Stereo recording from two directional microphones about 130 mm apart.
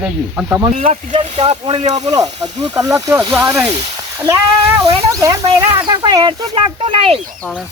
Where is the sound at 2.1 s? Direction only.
30° right (ahead or behind).